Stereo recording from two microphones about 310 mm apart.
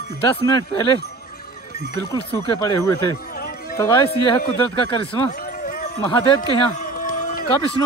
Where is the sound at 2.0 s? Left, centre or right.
Centre.